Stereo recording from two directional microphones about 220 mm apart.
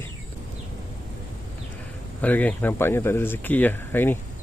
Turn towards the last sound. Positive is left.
turn(degrees=10)  # may be behind; listen again after turning